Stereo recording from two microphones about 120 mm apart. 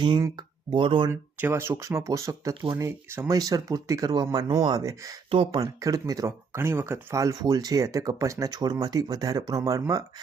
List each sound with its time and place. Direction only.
0.0 s speech: 40° right (ahead or behind)
1.1 s speech: 20° right (ahead or behind)
5.3 s speech: 50° right (ahead or behind)
5.5 s speech: 30° right (ahead or behind)